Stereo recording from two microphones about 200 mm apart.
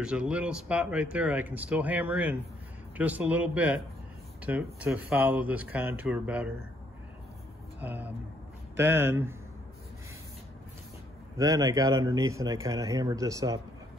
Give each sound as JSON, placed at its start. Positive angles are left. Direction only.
{"t": 0.0, "sound": "speech", "side_deg": -5}
{"t": 7.8, "sound": "speech", "side_deg": -10}
{"t": 11.3, "sound": "speech", "side_deg": -15}